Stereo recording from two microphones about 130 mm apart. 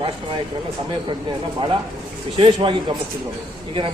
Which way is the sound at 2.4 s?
35° right (ahead or behind).